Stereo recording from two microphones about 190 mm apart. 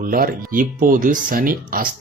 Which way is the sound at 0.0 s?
50° right (ahead or behind).